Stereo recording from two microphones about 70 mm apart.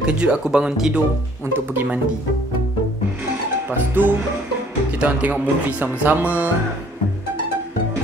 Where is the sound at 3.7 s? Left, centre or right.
Right.